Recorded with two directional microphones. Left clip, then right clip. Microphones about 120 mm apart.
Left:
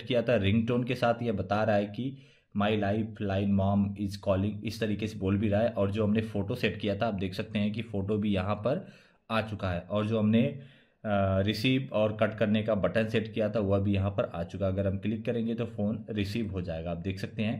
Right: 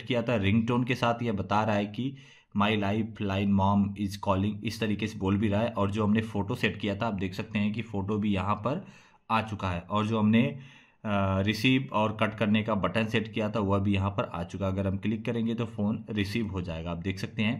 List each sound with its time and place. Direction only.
0.1 s speech: 15° right (ahead or behind)